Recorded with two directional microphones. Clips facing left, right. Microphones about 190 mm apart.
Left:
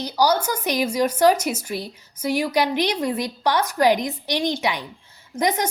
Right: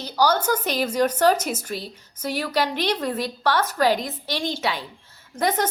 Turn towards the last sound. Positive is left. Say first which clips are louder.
# left 1 dB
turn(degrees=15)  # may be behind; listen again after turning